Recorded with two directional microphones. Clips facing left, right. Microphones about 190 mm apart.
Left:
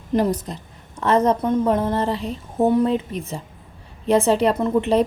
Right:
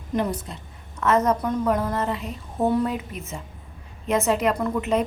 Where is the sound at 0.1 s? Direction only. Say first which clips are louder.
Left 5 dB; 40° left (ahead or behind).